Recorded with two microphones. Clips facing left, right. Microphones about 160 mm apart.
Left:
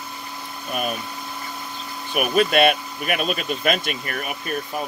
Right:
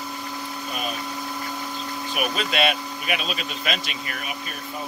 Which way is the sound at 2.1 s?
55° left (ahead or behind).